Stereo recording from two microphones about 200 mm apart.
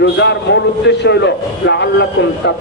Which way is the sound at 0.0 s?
60° left (ahead or behind).